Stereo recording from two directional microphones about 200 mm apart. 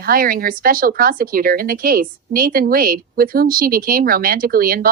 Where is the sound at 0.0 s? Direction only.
45° right (ahead or behind).